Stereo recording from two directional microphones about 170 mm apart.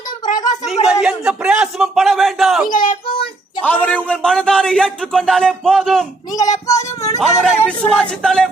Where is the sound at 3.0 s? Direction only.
30° left (ahead or behind).